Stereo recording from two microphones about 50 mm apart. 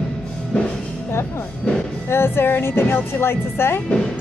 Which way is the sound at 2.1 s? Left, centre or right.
Left.